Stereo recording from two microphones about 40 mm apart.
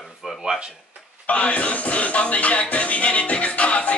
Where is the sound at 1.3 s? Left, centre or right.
Left.